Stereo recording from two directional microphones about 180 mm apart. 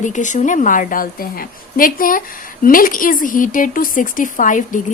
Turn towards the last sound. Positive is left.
turn(degrees=45)  # may be behind; listen again after turning